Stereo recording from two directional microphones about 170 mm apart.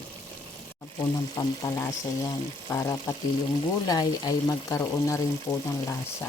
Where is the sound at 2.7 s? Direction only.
20° left (ahead or behind).